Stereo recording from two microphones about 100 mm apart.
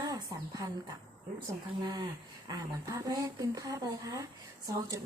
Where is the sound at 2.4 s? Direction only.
35° right (ahead or behind).